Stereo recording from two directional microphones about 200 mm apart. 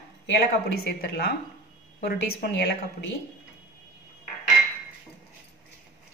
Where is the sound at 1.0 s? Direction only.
50° left (ahead or behind).